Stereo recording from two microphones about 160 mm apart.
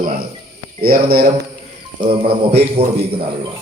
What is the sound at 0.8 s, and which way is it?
Speech, 70° right (ahead or behind).